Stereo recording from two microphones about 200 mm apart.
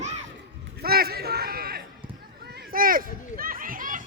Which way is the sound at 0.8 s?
50° right (ahead or behind).